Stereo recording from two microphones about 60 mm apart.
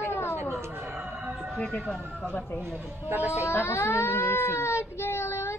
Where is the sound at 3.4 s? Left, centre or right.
Left.